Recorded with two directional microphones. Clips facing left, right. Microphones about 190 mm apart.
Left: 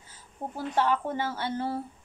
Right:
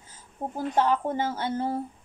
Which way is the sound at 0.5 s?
45° right (ahead or behind).